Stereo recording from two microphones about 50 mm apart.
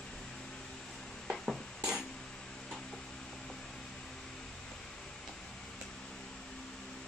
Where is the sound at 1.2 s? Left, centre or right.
Centre.